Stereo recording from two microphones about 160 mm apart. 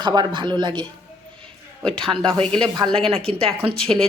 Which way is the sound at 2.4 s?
5° left (ahead or behind).